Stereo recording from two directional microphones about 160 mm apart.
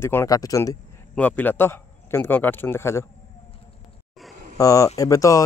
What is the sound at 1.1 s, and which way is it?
Speech, 10° left (ahead or behind).